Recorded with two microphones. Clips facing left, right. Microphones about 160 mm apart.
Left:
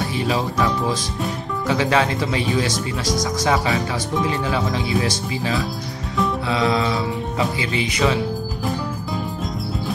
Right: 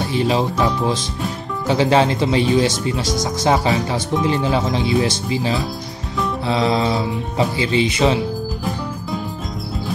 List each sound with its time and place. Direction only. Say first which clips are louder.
0.1 s speech: right 4 dB; 25° right (ahead or behind)